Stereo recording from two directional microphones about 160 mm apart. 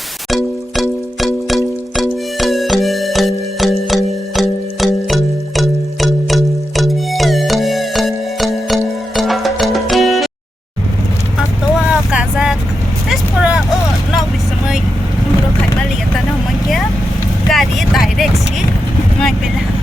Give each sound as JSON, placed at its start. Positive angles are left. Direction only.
{"t": 0.3, "sound": "music", "side_deg": 0}
{"t": 11.3, "sound": "vehicle", "side_deg": -5}
{"t": 17.5, "sound": "vehicle", "side_deg": 0}